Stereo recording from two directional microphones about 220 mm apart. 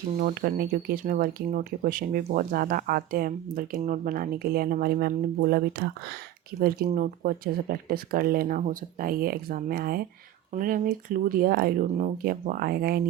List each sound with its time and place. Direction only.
0.2 s speech: 40° right (ahead or behind)